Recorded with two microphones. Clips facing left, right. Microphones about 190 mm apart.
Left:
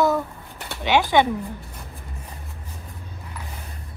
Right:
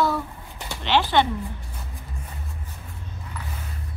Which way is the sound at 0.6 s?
Centre (ahead or behind).